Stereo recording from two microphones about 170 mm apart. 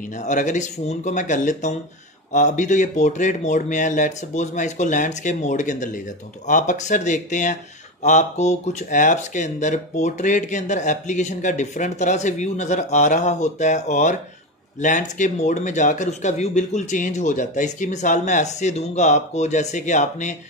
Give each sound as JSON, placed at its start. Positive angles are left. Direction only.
{"t": 0.2, "sound": "speech", "side_deg": 45}